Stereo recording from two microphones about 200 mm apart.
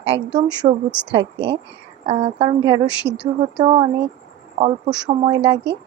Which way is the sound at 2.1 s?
30° right (ahead or behind).